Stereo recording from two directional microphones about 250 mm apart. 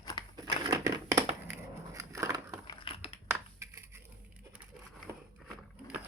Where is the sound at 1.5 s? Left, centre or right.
Centre.